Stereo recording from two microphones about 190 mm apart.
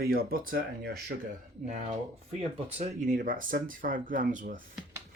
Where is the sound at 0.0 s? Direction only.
50° right (ahead or behind).